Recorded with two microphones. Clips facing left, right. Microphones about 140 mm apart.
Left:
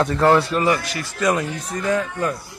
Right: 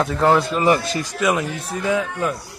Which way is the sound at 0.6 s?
25° right (ahead or behind).